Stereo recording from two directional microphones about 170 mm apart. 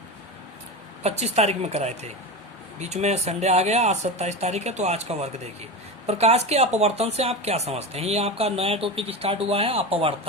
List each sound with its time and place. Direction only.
1.0 s speech: 40° right (ahead or behind)